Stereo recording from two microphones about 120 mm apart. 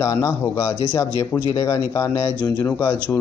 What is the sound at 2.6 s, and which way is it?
Speech, 15° left (ahead or behind).